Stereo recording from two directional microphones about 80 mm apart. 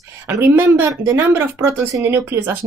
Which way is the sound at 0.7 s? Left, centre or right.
Right.